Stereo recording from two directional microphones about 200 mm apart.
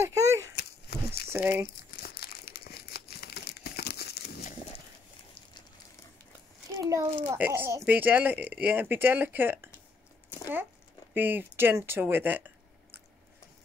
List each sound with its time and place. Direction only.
0.0 s a sound: 15° right (ahead or behind)
0.6 s a sound: 50° left (ahead or behind)
1.3 s a child's voice: 10° right (ahead or behind)
2.0 s crumpling: 50° left (ahead or behind)
6.8 s a child's voice: 15° right (ahead or behind)
11.1 s a child's voice: 10° right (ahead or behind)